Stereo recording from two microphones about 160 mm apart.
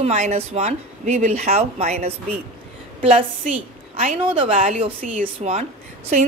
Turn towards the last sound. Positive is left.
turn(degrees=-45)  # may be behind; listen again after turning